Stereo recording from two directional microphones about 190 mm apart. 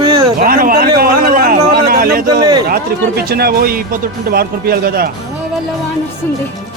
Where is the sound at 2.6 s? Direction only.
55° right (ahead or behind).